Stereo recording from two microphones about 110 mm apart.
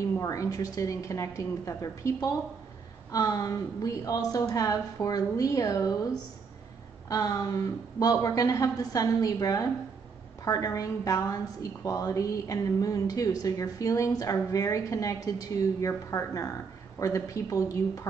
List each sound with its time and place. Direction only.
0.0 s a woman's voice: 30° left (ahead or behind)
7.1 s a woman's voice: 35° left (ahead or behind)